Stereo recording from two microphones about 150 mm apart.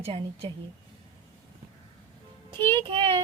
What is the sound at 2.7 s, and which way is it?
Speech, 35° right (ahead or behind).